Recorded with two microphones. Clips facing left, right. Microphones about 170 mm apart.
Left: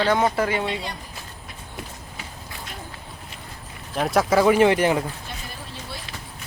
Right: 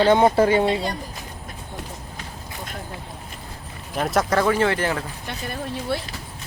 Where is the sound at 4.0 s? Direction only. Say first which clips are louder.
Left 2 dB; centre (ahead or behind).